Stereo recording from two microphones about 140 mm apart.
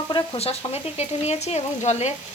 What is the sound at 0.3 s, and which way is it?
Speech, 45° left (ahead or behind).